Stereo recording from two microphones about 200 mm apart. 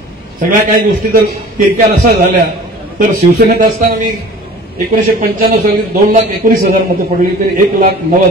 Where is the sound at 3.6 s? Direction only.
45° right (ahead or behind).